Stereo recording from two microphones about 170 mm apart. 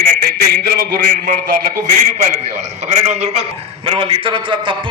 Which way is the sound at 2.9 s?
40° right (ahead or behind).